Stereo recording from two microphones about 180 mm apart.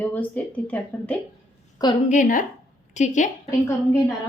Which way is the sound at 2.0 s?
45° left (ahead or behind).